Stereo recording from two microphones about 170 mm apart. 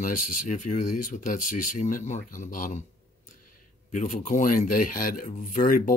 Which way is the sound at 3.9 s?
50° left (ahead or behind).